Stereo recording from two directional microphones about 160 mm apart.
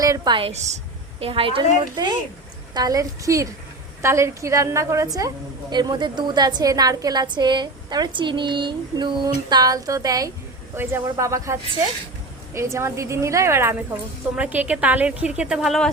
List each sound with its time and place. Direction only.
0.0 s a woman's voice: 25° right (ahead or behind)
12.5 s a woman's voice: 15° right (ahead or behind); by 15.9 s centre (ahead or behind)